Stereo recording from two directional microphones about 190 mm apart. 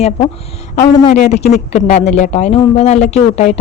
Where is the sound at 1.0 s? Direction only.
35° left (ahead or behind).